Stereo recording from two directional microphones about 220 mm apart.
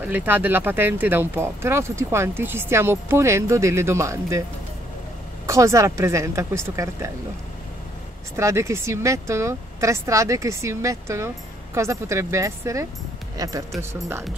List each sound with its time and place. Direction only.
0.0 s speech: 10° right (ahead or behind)
5.5 s speech: 15° right (ahead or behind)
8.4 s speech: 15° right (ahead or behind)